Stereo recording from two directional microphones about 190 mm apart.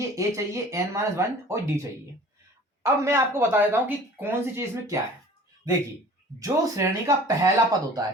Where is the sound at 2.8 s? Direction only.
15° right (ahead or behind).